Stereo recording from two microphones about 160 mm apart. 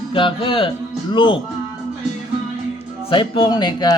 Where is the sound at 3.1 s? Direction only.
30° left (ahead or behind).